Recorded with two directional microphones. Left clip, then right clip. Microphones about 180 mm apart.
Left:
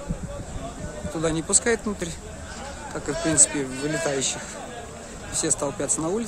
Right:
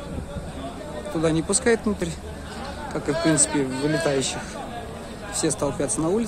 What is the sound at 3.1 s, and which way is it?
Speech, 35° left (ahead or behind).